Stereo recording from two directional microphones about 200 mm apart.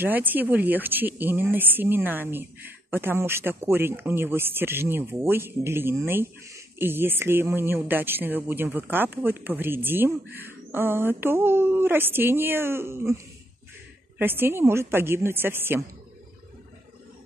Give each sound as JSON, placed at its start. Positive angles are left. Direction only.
{"t": 0.0, "sound": "speech", "side_deg": -10}